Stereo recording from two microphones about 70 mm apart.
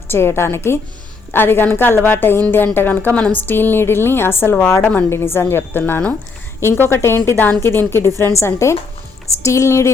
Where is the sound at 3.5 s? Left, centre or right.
Left.